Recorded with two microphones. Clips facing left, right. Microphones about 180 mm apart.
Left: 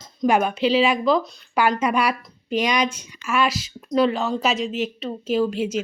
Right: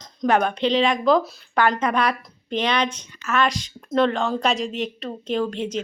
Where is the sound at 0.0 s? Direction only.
5° left (ahead or behind).